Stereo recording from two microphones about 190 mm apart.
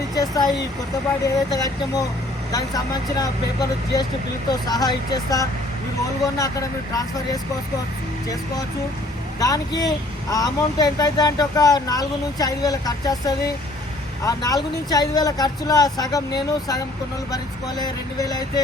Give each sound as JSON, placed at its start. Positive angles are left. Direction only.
{"t": 0.2, "sound": "speech", "side_deg": 20}
{"t": 9.4, "sound": "speech", "side_deg": 20}